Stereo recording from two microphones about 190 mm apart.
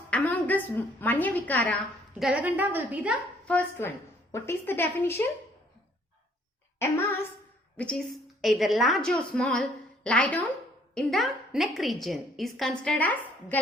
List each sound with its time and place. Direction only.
0.1 s a woman's voice: 10° left (ahead or behind)
3.4 s a woman's voice: 10° left (ahead or behind)
7.8 s a woman's voice: 5° left (ahead or behind)